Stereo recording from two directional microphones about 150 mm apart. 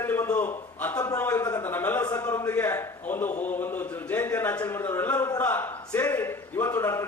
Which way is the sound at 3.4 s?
10° left (ahead or behind).